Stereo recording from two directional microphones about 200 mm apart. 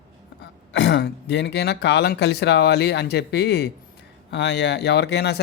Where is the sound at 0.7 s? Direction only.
65° left (ahead or behind).